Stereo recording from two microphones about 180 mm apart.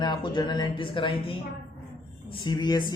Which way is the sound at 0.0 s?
25° left (ahead or behind).